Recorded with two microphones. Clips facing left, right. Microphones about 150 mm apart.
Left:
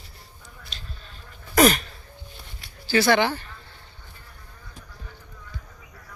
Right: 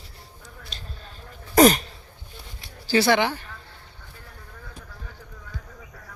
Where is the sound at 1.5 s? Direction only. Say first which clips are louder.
Right 3 dB; 35° right (ahead or behind).